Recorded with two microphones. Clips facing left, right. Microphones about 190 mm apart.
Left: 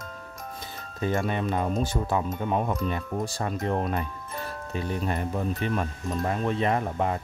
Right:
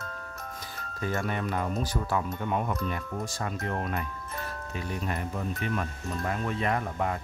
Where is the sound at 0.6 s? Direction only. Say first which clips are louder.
Left 5 dB; 25° left (ahead or behind).